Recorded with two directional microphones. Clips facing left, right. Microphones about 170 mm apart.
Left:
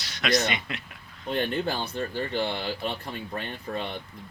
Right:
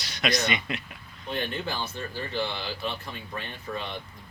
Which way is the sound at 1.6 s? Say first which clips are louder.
Left 3 dB; 60° left (ahead or behind).